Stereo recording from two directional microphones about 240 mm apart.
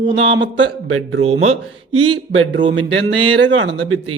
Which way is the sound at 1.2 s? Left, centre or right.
Right.